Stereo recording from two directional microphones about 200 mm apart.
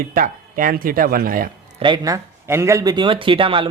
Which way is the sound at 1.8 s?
20° right (ahead or behind).